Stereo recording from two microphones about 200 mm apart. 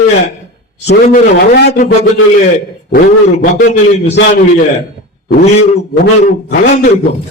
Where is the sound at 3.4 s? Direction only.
45° left (ahead or behind).